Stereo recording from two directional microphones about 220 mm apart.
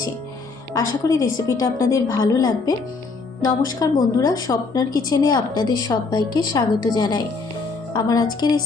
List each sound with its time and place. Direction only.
0.7 s a woman's voice: 15° left (ahead or behind)
3.8 s a woman's voice: 20° left (ahead or behind)